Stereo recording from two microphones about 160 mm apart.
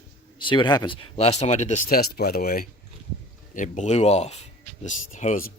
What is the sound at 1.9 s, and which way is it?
Speech, 75° left (ahead or behind).